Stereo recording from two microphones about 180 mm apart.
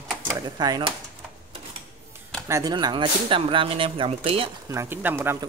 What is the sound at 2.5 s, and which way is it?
Speech, 20° right (ahead or behind).